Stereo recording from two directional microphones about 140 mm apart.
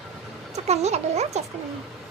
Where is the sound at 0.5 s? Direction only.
50° right (ahead or behind).